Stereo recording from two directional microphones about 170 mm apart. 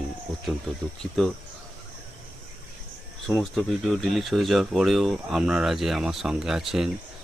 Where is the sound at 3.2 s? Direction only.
Centre (ahead or behind).